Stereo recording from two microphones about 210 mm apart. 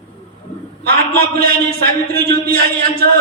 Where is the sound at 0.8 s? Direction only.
45° right (ahead or behind).